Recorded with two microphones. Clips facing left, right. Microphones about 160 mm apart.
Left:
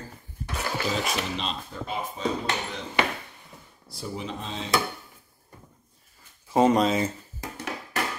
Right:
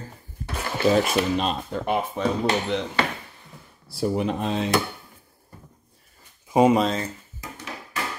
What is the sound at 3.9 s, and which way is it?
Speech, 60° right (ahead or behind).